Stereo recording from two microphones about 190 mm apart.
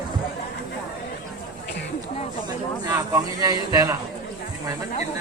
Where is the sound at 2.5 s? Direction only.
20° right (ahead or behind).